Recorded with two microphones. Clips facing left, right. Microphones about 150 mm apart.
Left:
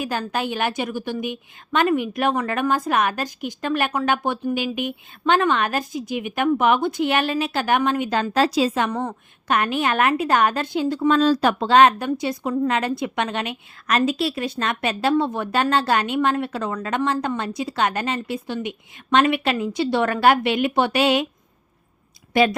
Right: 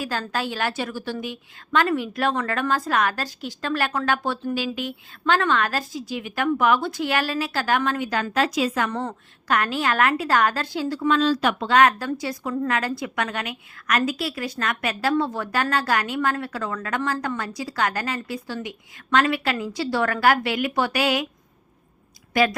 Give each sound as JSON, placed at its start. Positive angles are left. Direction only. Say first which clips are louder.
{"t": 0.0, "sound": "a woman's voice", "louder": "left 2 dB", "side_deg": 15}
{"t": 8.9, "sound": "a woman's voice", "louder": "left 2 dB", "side_deg": 10}
{"t": 9.5, "sound": "a woman's voice", "louder": "left 2 dB", "side_deg": 20}
{"t": 11.1, "sound": "a woman's voice", "louder": "left 2 dB", "side_deg": 40}
{"t": 22.3, "sound": "speech", "louder": "left 3 dB", "side_deg": 25}